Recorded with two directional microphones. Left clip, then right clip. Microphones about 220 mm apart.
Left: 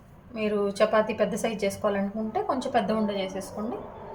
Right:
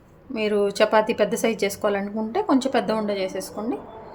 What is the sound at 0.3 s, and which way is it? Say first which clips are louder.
A woman's voice: right 4 dB; 45° right (ahead or behind).